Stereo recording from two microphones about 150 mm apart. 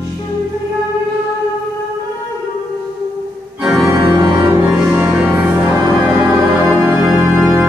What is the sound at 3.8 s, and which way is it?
Organ, 20° right (ahead or behind).